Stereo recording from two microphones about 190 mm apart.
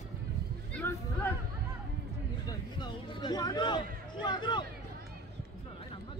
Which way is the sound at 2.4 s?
20° left (ahead or behind).